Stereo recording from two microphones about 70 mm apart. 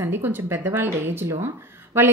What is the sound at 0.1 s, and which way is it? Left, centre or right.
A woman's voice, right.